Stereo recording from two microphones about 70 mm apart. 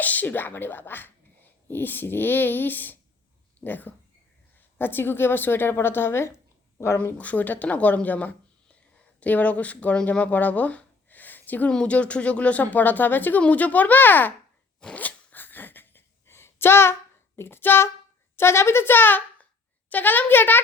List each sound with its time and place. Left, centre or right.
0.0 s a woman's voice: left
7.0 s speech: left
14.8 s zipper: centre; by 16.9 s left
17.3 s a woman's voice: left